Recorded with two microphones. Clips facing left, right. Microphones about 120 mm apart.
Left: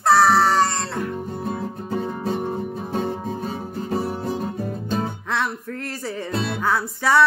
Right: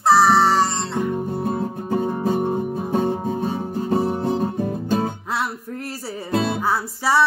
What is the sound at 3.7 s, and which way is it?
Music, 35° right (ahead or behind).